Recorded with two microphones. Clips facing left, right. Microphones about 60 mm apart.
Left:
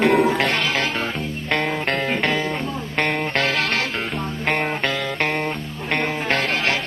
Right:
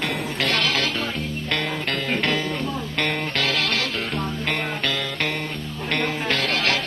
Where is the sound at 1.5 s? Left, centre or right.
Left.